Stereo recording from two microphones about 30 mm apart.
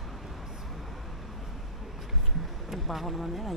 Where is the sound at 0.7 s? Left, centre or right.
Centre.